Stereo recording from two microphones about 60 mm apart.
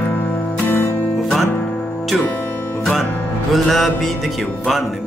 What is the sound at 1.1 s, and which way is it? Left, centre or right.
Music, centre.